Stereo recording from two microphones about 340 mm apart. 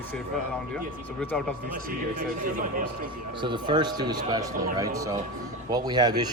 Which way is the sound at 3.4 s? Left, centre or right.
Centre.